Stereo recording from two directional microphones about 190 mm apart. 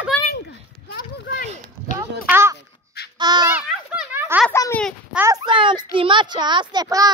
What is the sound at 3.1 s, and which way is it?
Babbling, 20° right (ahead or behind).